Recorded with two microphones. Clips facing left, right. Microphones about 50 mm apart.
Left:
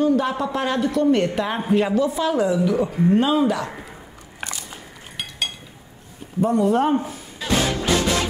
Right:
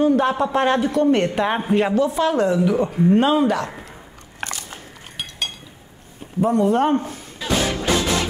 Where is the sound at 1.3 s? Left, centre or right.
Centre.